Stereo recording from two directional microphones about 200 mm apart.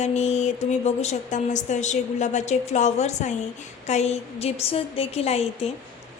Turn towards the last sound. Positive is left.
turn(degrees=30)  # may be behind; listen again after turning